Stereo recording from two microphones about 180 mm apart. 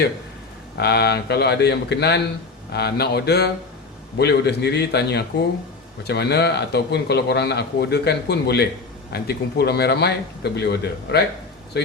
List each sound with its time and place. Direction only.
0.8 s speech: 65° left (ahead or behind)